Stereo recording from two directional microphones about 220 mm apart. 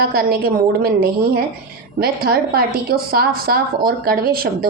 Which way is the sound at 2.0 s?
45° right (ahead or behind).